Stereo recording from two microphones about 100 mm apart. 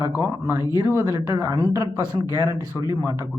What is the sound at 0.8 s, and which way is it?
Speech, 30° right (ahead or behind).